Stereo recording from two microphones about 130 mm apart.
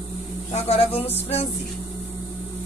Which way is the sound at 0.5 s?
55° left (ahead or behind).